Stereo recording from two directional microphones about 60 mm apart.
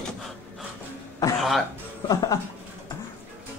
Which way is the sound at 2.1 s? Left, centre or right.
Left.